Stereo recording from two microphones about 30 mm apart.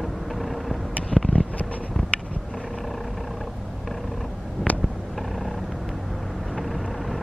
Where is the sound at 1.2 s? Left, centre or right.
Left.